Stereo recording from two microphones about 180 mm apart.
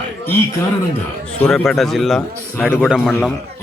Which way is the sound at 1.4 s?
5° left (ahead or behind).